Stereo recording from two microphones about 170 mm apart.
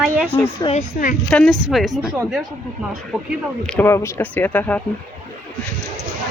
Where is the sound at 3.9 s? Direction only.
15° left (ahead or behind).